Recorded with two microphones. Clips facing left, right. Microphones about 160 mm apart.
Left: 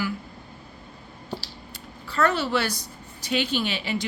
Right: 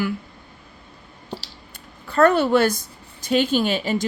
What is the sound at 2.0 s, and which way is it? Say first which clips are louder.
A woman's voice: right 7 dB; 50° right (ahead or behind).